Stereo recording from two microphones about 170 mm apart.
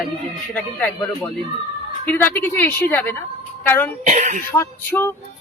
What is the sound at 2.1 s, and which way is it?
A man's voice, 10° left (ahead or behind).